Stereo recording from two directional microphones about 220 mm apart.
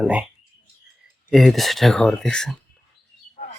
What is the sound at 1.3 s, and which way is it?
Speech, centre (ahead or behind).